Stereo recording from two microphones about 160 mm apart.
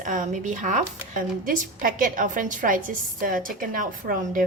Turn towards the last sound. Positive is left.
turn(degrees=-55)  # may be behind; listen again after turning